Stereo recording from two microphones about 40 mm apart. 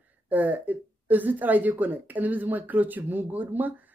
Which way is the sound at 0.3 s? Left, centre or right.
Right.